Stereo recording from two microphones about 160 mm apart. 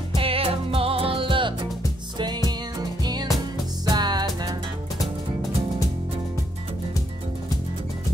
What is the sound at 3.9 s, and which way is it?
Music, 25° right (ahead or behind).